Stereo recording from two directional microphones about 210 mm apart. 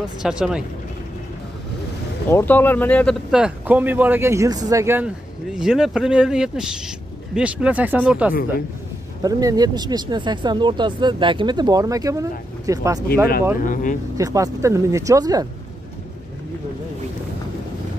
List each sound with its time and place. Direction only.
0.2 s speech: 5° right (ahead or behind)
2.2 s speech: 10° left (ahead or behind); by 8.4 s 5° right (ahead or behind)
9.2 s speech: 15° right (ahead or behind)
13.7 s speech: 40° left (ahead or behind)
14.1 s speech: 15° right (ahead or behind)